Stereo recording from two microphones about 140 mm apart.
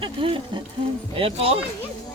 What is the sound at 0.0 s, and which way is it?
Speech, 35° right (ahead or behind).